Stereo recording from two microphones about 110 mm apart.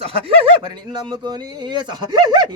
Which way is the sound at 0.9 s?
40° right (ahead or behind).